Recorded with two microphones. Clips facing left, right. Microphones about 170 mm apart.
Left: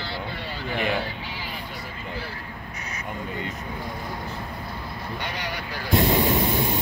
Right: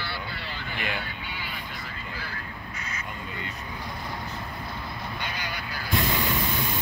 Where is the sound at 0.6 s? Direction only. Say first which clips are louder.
Left 8 dB; 40° left (ahead or behind).